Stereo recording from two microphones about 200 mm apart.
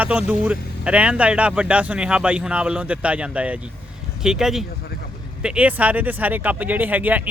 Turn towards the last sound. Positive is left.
turn(degrees=-10)  # may be behind; listen again after turning